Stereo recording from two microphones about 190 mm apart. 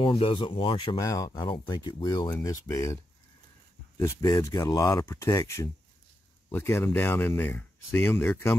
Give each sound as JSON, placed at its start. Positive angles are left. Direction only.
{"t": 0.0, "sound": "speech", "side_deg": 30}
{"t": 4.0, "sound": "speech", "side_deg": 20}